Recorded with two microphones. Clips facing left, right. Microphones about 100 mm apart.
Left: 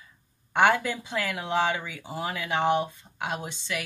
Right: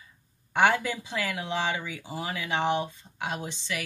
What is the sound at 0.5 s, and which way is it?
Speech, 50° left (ahead or behind).